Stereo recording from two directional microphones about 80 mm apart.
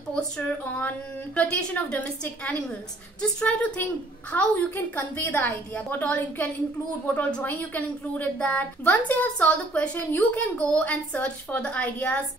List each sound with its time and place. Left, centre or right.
0.1 s a woman's voice: centre